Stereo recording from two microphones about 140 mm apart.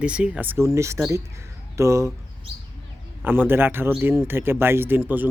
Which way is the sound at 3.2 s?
15° right (ahead or behind).